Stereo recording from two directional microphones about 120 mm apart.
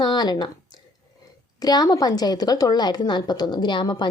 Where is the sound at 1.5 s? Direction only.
30° left (ahead or behind).